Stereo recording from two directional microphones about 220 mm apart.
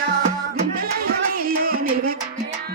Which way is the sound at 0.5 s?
40° right (ahead or behind).